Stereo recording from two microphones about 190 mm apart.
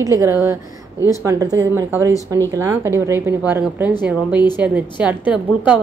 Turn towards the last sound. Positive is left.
turn(degrees=-5)  # may be behind; listen again after turning